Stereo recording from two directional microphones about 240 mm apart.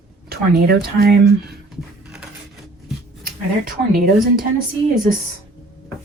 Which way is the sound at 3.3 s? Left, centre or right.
Right.